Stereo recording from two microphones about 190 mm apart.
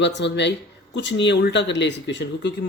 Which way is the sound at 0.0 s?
65° left (ahead or behind).